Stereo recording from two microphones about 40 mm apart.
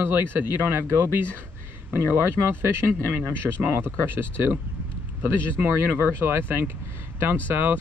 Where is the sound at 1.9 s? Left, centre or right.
Right.